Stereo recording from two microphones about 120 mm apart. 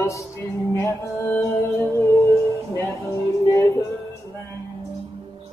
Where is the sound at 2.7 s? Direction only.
25° left (ahead or behind).